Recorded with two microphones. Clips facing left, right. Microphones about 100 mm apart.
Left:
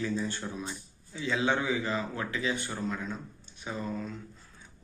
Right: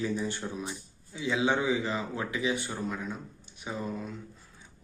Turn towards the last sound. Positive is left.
turn(degrees=-15)  # may be behind; listen again after turning